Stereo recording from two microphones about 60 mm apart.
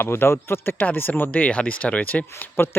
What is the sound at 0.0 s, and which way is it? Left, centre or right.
Speech, left.